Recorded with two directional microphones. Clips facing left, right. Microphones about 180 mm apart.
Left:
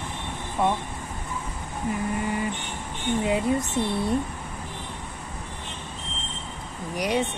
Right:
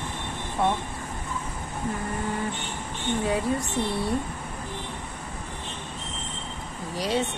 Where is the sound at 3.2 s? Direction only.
20° left (ahead or behind).